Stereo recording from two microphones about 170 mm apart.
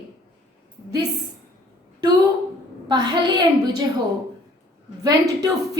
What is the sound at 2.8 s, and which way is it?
A woman's voice, 25° right (ahead or behind).